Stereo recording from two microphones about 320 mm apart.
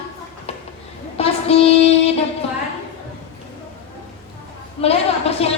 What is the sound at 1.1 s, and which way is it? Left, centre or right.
Child singing, centre.